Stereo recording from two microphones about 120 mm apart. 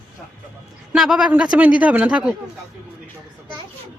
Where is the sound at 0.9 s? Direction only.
5° right (ahead or behind).